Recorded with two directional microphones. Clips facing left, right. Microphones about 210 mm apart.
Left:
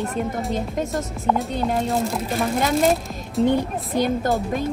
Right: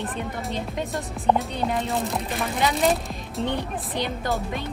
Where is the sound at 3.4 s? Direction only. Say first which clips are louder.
Left 7 dB; 45° left (ahead or behind).